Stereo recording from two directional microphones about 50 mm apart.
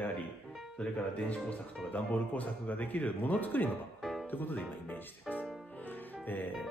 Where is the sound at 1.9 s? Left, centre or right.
Left.